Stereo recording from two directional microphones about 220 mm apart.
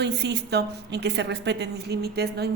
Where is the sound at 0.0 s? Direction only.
50° right (ahead or behind).